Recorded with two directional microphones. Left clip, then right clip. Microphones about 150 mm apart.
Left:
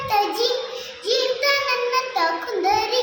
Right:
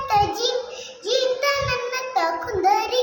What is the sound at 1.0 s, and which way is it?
Child singing, 10° right (ahead or behind).